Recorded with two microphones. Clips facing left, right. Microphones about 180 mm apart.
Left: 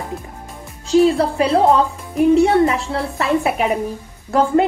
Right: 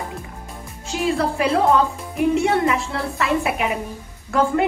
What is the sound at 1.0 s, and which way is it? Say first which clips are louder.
A woman's voice: left 5 dB; 35° left (ahead or behind).